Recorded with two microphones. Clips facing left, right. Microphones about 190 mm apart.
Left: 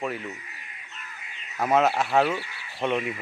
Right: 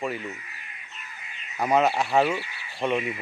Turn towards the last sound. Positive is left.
turn(degrees=0)  # may be behind; listen again after turning